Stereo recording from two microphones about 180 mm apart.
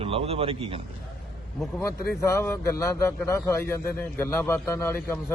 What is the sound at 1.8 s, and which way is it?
A man's voice, 15° left (ahead or behind).